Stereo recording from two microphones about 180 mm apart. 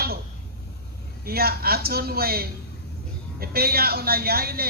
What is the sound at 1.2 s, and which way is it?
Speech, 60° right (ahead or behind).